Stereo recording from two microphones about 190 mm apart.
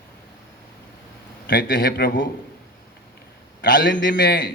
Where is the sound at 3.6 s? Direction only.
60° left (ahead or behind).